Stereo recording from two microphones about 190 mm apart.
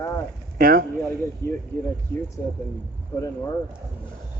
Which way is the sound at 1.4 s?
15° left (ahead or behind).